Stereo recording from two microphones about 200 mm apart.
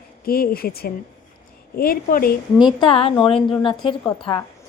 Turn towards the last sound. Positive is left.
turn(degrees=25)  # may be behind; listen again after turning